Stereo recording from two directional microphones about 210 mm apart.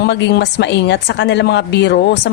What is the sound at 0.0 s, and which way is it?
A woman's voice, 55° left (ahead or behind).